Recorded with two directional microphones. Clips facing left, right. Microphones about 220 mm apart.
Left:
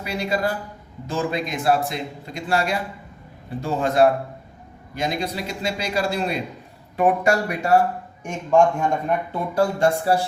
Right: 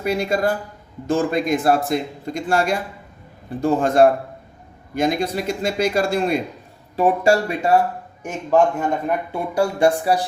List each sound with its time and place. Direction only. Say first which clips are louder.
0.0 s a man's voice: right 4 dB; 50° right (ahead or behind)
6.9 s speech: right 2 dB; 25° right (ahead or behind)
8.5 s speech: even; 5° right (ahead or behind)